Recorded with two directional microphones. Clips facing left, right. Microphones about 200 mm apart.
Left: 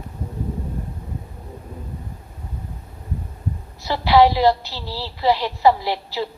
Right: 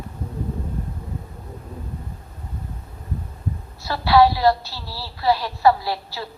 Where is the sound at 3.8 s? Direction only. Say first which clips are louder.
Left 1 dB; 15° left (ahead or behind).